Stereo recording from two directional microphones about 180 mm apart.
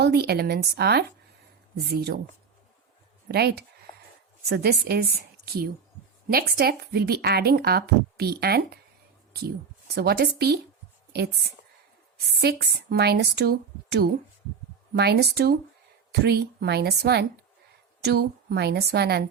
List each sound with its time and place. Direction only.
0.0 s speech: 65° right (ahead or behind)
3.2 s speech: 60° right (ahead or behind)
6.2 s speech: 60° right (ahead or behind)
9.9 s a woman's voice: 60° right (ahead or behind)